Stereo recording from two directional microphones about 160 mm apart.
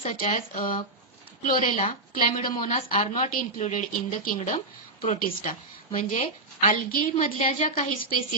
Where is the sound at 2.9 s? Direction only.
45° left (ahead or behind).